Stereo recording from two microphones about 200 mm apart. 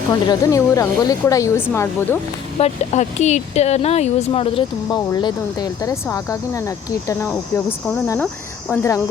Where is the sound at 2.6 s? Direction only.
35° left (ahead or behind); by 9.0 s 15° left (ahead or behind).